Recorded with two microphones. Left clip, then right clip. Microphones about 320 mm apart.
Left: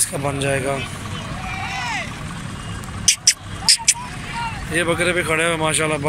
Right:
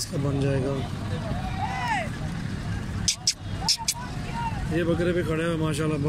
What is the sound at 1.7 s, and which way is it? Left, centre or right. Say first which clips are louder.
Vehicle: left 2 dB; right.